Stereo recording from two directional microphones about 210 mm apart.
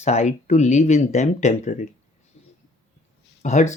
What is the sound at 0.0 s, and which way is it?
Speech, 30° left (ahead or behind).